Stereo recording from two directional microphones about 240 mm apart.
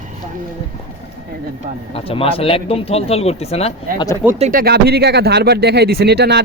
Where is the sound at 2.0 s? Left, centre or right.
Left.